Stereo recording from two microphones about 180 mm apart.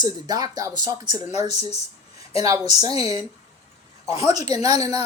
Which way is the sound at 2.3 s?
20° right (ahead or behind).